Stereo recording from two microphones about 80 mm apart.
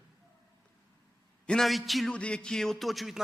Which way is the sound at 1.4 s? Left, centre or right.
Centre.